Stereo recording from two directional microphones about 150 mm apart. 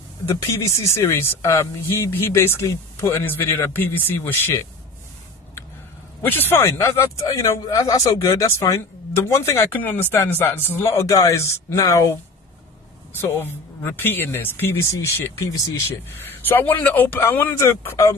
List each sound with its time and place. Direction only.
0.3 s speech: 20° left (ahead or behind)
6.3 s speech: 15° left (ahead or behind)
13.2 s speech: 15° left (ahead or behind)